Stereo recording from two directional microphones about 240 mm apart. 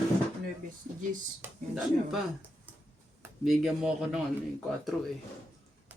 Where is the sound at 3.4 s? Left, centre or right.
Centre.